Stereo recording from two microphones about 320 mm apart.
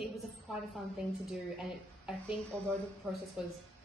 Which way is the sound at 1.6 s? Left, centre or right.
Centre.